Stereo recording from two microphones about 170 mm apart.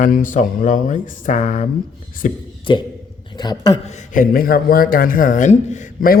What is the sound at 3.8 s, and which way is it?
Speech, 50° left (ahead or behind).